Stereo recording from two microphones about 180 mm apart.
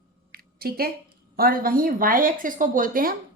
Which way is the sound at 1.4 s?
55° right (ahead or behind).